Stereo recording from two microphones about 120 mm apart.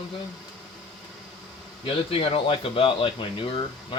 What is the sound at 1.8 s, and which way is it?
Speech, 50° left (ahead or behind).